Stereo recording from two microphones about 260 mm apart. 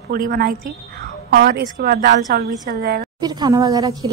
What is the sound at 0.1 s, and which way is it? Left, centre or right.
A woman's voice, right.